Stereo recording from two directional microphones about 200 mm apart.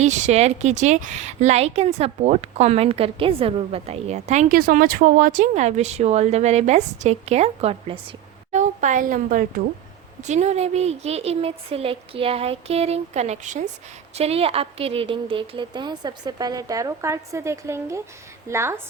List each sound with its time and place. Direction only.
0.0 s speech: 35° right (ahead or behind)
8.5 s a woman's voice: 40° right (ahead or behind); by 18.8 s 15° right (ahead or behind)